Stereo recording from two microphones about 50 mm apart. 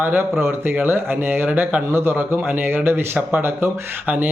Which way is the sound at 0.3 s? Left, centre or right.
Right.